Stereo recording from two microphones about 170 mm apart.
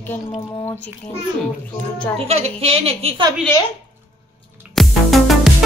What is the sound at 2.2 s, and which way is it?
A woman's voice, 35° right (ahead or behind).